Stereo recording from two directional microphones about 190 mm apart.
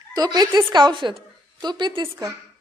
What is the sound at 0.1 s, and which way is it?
A woman's voice, 20° right (ahead or behind).